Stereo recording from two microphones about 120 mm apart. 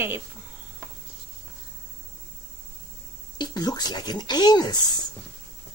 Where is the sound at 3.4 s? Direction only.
35° left (ahead or behind).